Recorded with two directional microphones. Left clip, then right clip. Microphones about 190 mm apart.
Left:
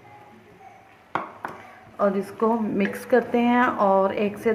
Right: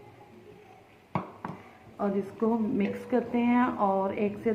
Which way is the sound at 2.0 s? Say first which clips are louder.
Left 8 dB; 55° left (ahead or behind).